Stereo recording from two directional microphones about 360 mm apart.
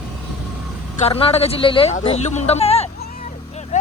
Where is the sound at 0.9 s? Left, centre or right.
Centre.